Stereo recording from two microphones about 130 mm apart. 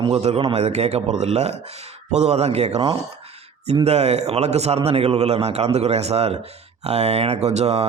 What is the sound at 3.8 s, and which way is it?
A man's voice, 55° right (ahead or behind).